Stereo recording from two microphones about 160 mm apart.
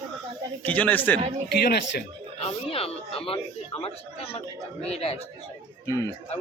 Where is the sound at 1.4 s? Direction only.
90° left.